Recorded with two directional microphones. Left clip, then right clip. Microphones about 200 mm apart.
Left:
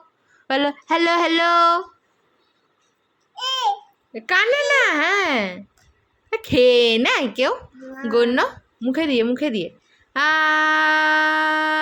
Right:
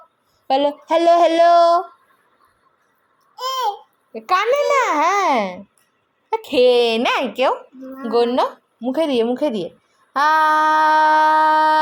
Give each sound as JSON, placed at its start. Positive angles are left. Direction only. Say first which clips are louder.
{"t": 0.4, "sound": "a woman's voice", "louder": "right 3 dB", "side_deg": 15}
{"t": 3.3, "sound": "babbling", "louder": "even", "side_deg": 10}
{"t": 4.5, "sound": "a child's voice", "louder": "right 1 dB", "side_deg": 5}
{"t": 6.6, "sound": "a woman's voice", "louder": "even", "side_deg": 20}